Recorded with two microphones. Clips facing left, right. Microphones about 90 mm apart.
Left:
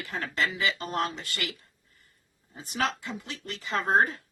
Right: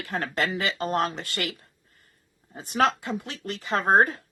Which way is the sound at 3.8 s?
55° right (ahead or behind).